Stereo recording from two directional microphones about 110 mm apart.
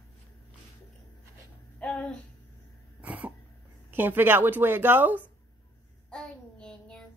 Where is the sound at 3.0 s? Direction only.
15° right (ahead or behind).